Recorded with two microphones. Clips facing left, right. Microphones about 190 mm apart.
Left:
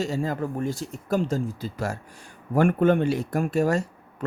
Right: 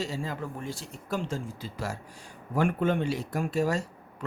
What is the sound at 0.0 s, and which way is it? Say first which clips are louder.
Speech: left 7 dB; 45° left (ahead or behind).